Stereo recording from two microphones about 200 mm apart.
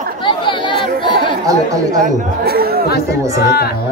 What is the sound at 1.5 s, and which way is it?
Speech, 15° right (ahead or behind).